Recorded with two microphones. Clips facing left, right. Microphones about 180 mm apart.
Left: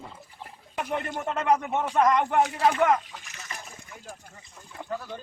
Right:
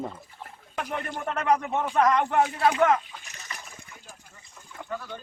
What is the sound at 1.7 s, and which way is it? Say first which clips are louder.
Speech: even; 15° left (ahead or behind).